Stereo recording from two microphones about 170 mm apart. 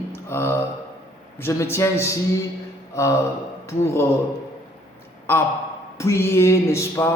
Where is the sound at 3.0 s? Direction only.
15° left (ahead or behind).